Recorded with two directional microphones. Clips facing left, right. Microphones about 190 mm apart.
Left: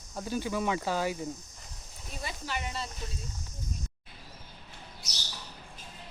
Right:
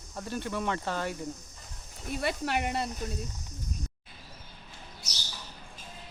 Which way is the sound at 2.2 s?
60° right (ahead or behind).